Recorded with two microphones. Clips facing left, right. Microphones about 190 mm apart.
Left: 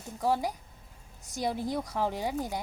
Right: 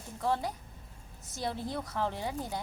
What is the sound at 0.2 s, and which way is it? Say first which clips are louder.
Speech: left 3 dB; 10° left (ahead or behind).